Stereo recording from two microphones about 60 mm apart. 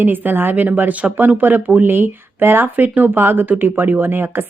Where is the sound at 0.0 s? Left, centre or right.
Right.